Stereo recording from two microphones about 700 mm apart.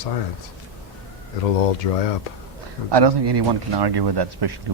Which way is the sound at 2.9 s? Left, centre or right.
Right.